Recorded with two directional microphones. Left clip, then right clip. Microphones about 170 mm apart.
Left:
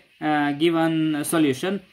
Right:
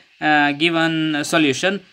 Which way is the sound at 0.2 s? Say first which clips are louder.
Right 6 dB; 20° right (ahead or behind).